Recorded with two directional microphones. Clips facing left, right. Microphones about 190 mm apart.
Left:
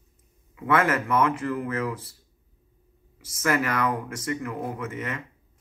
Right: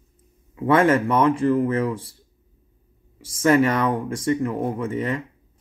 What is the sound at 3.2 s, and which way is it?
Speech, 30° right (ahead or behind).